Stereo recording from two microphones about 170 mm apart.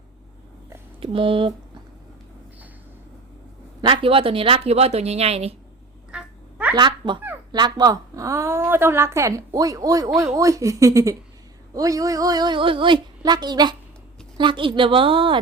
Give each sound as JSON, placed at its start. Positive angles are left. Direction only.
{"t": 0.9, "sound": "speech", "side_deg": -30}
{"t": 3.8, "sound": "speech", "side_deg": -30}
{"t": 6.1, "sound": "cat", "side_deg": -5}
{"t": 6.7, "sound": "a woman's voice", "side_deg": -25}